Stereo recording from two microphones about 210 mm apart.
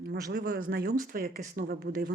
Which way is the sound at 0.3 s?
45° right (ahead or behind).